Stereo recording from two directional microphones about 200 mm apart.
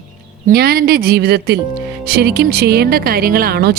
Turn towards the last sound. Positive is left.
turn(degrees=-50)  # may be behind; listen again after turning